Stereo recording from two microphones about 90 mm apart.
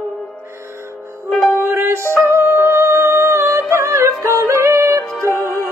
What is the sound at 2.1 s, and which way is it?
Music, 25° right (ahead or behind).